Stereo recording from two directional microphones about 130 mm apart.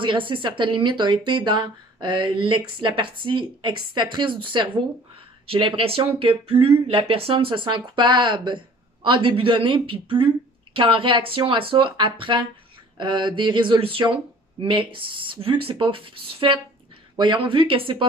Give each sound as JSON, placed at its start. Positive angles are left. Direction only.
{"t": 0.0, "sound": "speech", "side_deg": -40}